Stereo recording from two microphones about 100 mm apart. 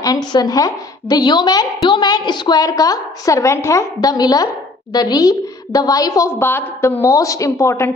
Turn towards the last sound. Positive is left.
turn(degrees=30)  # may be behind; listen again after turning